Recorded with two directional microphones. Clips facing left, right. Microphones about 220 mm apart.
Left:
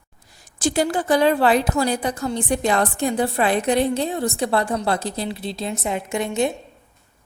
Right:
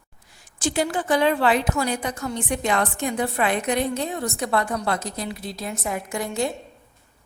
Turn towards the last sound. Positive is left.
turn(degrees=20)  # may be behind; listen again after turning